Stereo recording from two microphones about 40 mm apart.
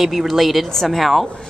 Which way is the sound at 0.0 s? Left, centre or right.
Centre.